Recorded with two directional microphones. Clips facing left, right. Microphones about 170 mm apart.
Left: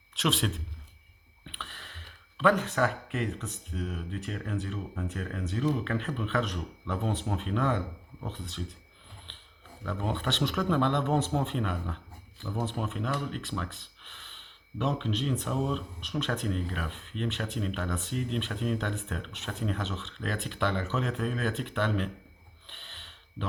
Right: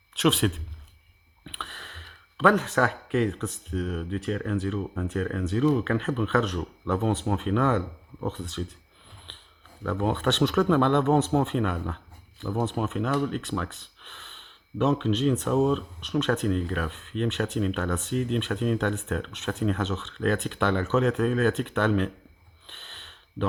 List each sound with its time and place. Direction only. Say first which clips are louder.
0.2 s speech: right 6 dB; 60° right (ahead or behind)
2.5 s speech: right 2 dB; 90° right
9.8 s speech: right 7 dB; 90° right; by 13.7 s 70° right (ahead or behind)
14.8 s speech: right 7 dB; 80° right
18.4 s speech: right 6 dB; 85° right